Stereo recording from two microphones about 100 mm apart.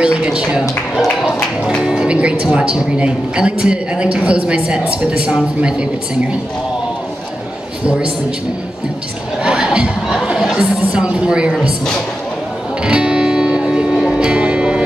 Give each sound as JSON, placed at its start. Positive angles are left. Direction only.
{"t": 0.0, "sound": "speech", "side_deg": -10}
{"t": 9.4, "sound": "speech", "side_deg": -10}
{"t": 12.8, "sound": "music", "side_deg": -10}